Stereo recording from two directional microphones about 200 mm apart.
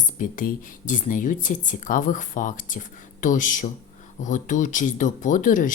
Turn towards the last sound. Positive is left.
turn(degrees=40)  # may be behind; listen again after turning